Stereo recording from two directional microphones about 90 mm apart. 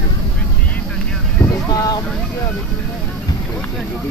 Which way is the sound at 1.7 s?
45° left (ahead or behind).